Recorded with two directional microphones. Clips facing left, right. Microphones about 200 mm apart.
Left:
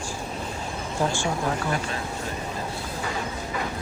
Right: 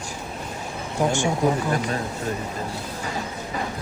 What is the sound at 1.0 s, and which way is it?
Speech, 15° right (ahead or behind).